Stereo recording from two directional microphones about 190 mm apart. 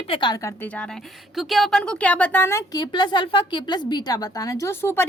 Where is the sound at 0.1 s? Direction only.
25° left (ahead or behind).